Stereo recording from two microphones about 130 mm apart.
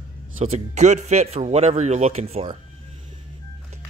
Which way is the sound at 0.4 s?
55° right (ahead or behind).